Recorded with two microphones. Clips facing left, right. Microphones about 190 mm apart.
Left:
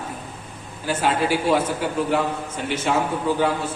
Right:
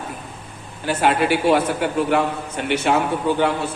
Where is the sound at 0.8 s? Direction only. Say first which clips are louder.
Right 3 dB; 65° right (ahead or behind).